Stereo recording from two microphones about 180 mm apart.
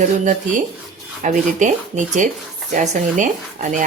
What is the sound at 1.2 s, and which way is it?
Speech, 45° right (ahead or behind).